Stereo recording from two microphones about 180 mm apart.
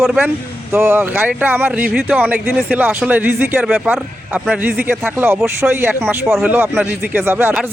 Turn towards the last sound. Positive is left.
turn(degrees=-10)  # may be behind; listen again after turning